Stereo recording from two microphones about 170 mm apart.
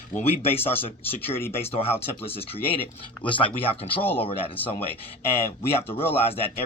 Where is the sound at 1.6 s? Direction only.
35° left (ahead or behind).